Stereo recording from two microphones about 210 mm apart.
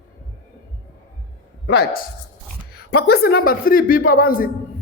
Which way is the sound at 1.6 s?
50° left (ahead or behind).